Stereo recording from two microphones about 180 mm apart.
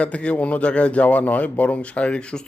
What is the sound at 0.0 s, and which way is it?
A man's voice, 5° left (ahead or behind).